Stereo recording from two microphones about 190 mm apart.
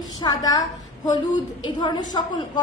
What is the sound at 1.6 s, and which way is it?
A woman's voice, 25° left (ahead or behind).